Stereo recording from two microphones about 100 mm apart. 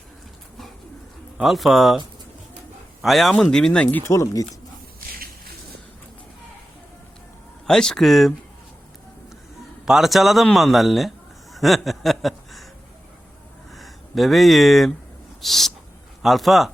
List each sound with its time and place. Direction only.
1.4 s a man's voice: centre (ahead or behind)
3.0 s a man's voice: centre (ahead or behind)
4.0 s speech: 30° left (ahead or behind)
7.7 s a man's voice: 5° left (ahead or behind)
9.8 s a man's voice: 5° right (ahead or behind)
11.5 s a sound: centre (ahead or behind)
13.7 s a man's voice: centre (ahead or behind)